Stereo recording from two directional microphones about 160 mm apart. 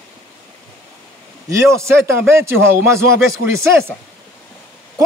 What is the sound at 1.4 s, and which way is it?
Speech, 15° right (ahead or behind).